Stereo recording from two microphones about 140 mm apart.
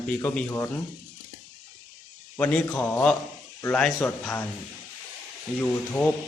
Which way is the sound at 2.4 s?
10° left (ahead or behind).